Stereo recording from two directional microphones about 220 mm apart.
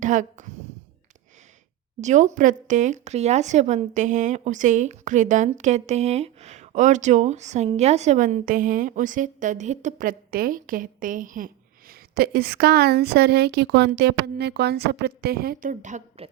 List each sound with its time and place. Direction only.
0.0 s speech: 35° right (ahead or behind)
2.0 s speech: 30° right (ahead or behind)